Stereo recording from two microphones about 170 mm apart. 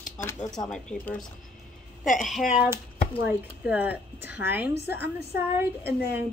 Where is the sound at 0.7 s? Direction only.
5° left (ahead or behind).